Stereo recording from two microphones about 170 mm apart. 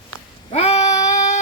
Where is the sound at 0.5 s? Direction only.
40° left (ahead or behind).